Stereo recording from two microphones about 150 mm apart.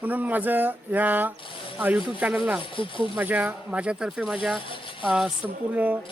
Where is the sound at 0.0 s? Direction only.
10° right (ahead or behind).